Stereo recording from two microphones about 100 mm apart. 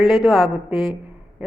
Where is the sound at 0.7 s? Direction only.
60° left (ahead or behind).